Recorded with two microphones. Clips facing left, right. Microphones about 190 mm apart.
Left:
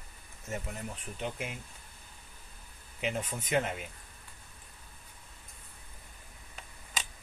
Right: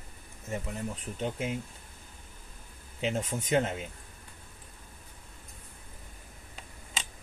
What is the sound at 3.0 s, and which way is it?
Speech, 25° right (ahead or behind).